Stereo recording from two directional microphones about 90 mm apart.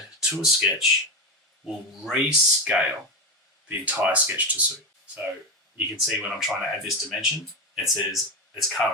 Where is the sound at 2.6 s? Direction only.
15° right (ahead or behind).